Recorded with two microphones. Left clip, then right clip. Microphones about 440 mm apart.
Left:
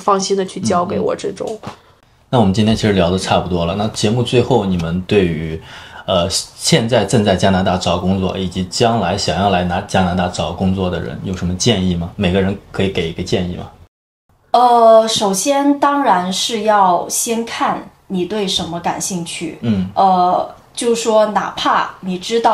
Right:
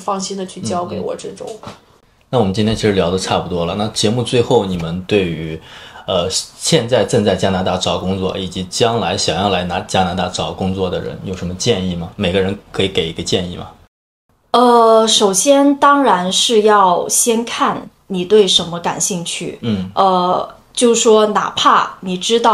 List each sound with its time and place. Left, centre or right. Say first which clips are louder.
0.0 s speech: left 6 dB; left
2.3 s speech: left 1 dB; centre
14.5 s a woman's voice: left 1 dB; right
20.7 s a woman's voice: right 3 dB; right